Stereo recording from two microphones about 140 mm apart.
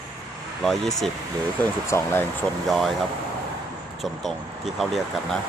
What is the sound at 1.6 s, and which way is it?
Speech, 15° left (ahead or behind).